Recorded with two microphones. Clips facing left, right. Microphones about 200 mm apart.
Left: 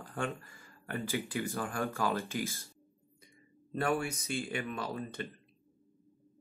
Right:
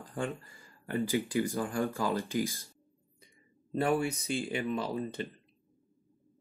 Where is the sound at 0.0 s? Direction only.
15° right (ahead or behind).